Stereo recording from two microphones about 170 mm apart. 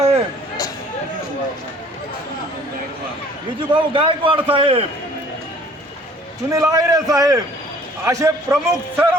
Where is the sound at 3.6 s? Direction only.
30° right (ahead or behind).